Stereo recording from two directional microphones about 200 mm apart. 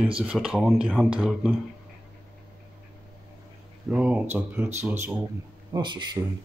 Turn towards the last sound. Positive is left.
turn(degrees=-20)  # may be behind; listen again after turning